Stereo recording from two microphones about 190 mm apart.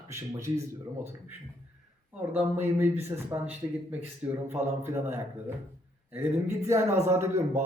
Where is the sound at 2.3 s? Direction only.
10° right (ahead or behind).